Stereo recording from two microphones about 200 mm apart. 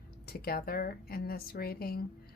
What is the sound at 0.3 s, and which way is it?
Speech, 50° left (ahead or behind).